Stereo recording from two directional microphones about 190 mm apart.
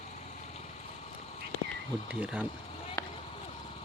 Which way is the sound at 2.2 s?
5° right (ahead or behind).